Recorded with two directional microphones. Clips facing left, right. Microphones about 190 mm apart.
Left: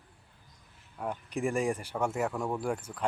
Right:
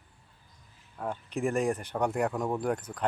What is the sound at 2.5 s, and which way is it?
Speech, 5° left (ahead or behind).